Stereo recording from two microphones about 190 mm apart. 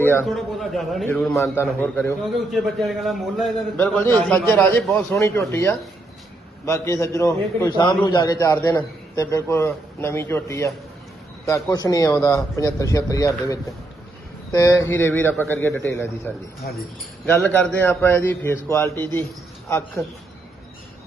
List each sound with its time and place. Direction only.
0.0 s a man's voice: 10° left (ahead or behind)
0.3 s a man's voice: centre (ahead or behind)
2.2 s a man's voice: centre (ahead or behind)
3.8 s a man's voice: 10° left (ahead or behind)
14.5 s a man's voice: 15° left (ahead or behind)